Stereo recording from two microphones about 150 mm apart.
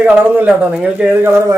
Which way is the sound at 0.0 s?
10° right (ahead or behind).